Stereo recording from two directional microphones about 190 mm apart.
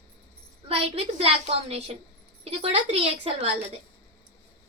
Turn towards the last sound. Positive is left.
turn(degrees=-30)  # may be behind; listen again after turning